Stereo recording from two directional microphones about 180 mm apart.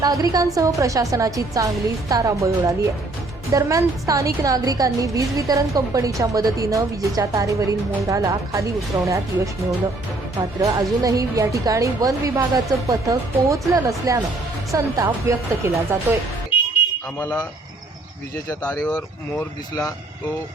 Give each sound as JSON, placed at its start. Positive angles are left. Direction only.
{"t": 0.0, "sound": "a woman's voice", "side_deg": -20}
{"t": 10.6, "sound": "a woman's voice", "side_deg": -20}
{"t": 18.4, "sound": "speech", "side_deg": 10}
{"t": 18.9, "sound": "speech", "side_deg": 20}